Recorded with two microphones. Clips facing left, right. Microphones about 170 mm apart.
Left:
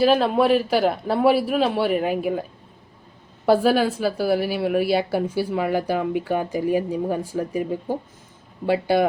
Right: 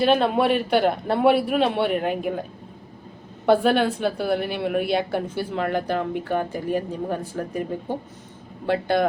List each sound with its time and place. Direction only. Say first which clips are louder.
0.0 s a man's voice: left 2 dB; centre (ahead or behind)
3.4 s a woman's voice: left 1 dB; 5° left (ahead or behind)